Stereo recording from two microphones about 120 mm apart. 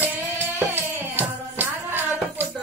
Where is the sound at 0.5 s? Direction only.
15° right (ahead or behind).